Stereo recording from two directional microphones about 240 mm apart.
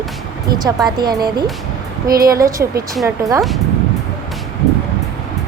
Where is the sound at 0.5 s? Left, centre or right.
Right.